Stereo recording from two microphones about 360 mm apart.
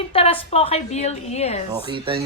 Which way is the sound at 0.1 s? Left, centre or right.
Centre.